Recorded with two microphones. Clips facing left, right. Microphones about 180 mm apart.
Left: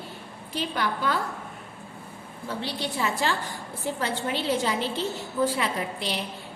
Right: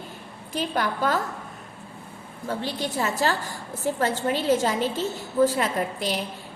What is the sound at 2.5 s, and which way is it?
A woman's voice, 45° right (ahead or behind).